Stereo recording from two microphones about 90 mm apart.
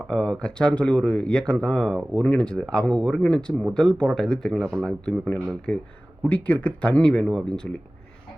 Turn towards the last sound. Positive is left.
turn(degrees=10)  # may be behind; listen again after turning